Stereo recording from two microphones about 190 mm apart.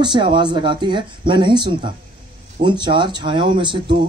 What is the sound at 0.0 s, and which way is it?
Speech, 25° right (ahead or behind).